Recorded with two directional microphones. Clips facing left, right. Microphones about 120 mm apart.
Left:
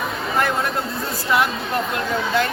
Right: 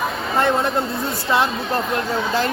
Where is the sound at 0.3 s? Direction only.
25° right (ahead or behind).